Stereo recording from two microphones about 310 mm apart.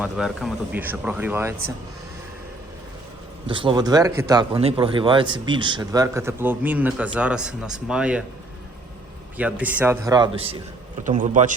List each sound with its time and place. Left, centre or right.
0.0 s speech: centre
3.4 s speech: centre
9.4 s a man's voice: centre; by 11.5 s right